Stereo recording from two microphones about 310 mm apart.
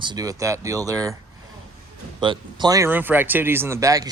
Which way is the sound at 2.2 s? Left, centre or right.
Centre.